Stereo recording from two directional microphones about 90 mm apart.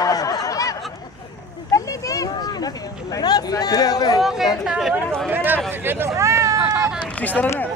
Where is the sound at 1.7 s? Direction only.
40° left (ahead or behind).